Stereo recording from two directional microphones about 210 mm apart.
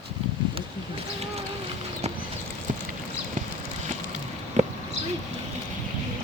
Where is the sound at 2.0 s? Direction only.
30° right (ahead or behind).